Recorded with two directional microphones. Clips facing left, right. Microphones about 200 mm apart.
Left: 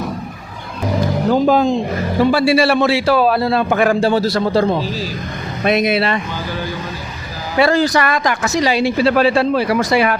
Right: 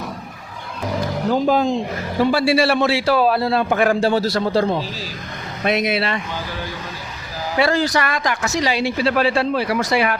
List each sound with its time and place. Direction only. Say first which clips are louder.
1.3 s a man's voice: left 3 dB; 75° left (ahead or behind)
5.6 s speech: left 4 dB; 40° left (ahead or behind)
7.6 s speech: left 4 dB; 50° left (ahead or behind)
8.6 s speech: left 5 dB; 40° left (ahead or behind)